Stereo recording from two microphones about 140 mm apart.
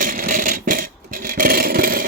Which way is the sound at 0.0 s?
75° right (ahead or behind).